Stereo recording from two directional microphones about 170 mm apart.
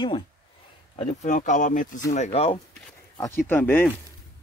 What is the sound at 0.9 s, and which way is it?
Speech, 45° left (ahead or behind).